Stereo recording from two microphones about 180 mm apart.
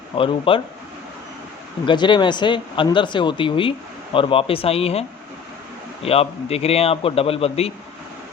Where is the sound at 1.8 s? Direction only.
25° left (ahead or behind).